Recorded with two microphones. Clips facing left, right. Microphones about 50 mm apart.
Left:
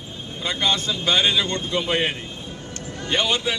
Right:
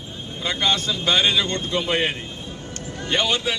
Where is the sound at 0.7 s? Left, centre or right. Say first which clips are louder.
Right 1 dB; centre.